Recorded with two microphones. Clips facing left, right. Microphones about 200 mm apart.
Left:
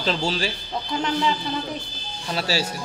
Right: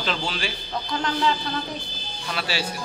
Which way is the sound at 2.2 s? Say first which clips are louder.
Left 4 dB; 35° left (ahead or behind).